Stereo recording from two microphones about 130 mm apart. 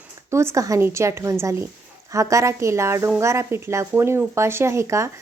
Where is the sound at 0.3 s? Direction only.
20° right (ahead or behind).